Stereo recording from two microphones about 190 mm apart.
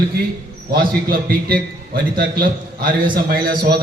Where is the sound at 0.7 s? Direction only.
50° right (ahead or behind).